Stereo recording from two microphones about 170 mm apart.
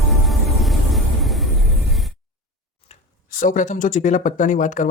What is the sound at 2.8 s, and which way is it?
Speech, 50° left (ahead or behind).